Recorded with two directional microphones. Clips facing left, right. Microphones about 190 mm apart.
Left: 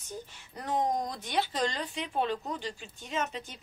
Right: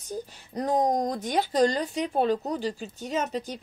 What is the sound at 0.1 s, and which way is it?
Speech, 40° right (ahead or behind).